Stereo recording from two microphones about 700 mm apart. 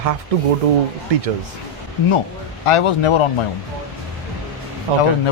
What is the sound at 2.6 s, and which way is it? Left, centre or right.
Speech, left.